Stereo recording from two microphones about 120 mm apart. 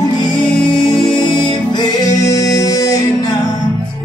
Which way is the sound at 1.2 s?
40° left (ahead or behind).